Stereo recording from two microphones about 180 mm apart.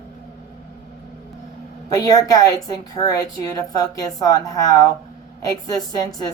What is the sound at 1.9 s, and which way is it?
A woman's voice, 20° left (ahead or behind).